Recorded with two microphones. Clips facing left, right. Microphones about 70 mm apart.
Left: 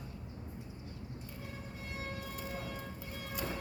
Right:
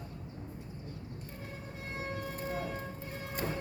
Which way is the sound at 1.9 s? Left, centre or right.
Right.